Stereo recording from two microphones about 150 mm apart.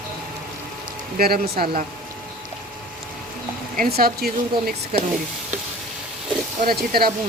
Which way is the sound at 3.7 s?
85° right.